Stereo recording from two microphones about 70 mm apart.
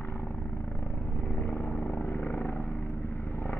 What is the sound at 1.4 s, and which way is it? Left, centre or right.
Vehicle, left.